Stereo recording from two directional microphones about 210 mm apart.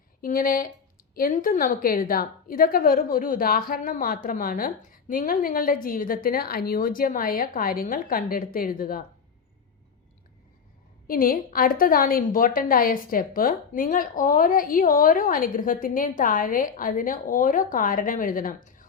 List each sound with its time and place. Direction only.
0.2 s a woman's voice: 45° left (ahead or behind)
11.1 s a woman's voice: 45° left (ahead or behind)